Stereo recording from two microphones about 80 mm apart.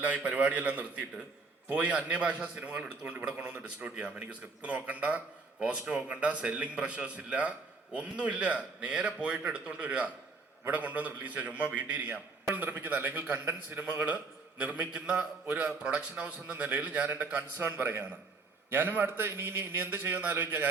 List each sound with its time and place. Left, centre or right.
0.0 s a man's voice: centre